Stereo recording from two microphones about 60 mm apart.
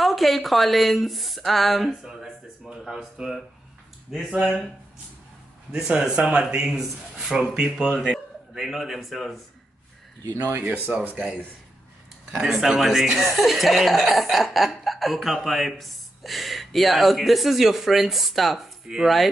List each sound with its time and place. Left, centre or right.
0.0 s a man's voice: centre
5.7 s a man's voice: centre
7.9 s a man's voice: centre
10.9 s speech: right
12.4 s speech: centre